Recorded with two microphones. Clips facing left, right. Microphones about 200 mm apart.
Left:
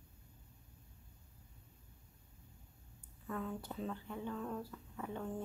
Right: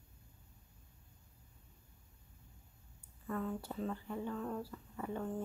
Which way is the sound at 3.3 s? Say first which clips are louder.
Right 3 dB; centre (ahead or behind).